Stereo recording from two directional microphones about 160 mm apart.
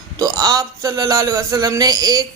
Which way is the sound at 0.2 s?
25° right (ahead or behind).